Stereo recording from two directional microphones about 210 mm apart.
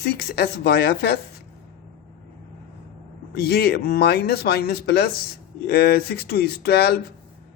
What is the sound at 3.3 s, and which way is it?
Speech, 50° left (ahead or behind).